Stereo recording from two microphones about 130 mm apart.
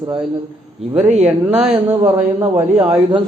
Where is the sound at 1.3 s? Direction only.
15° right (ahead or behind).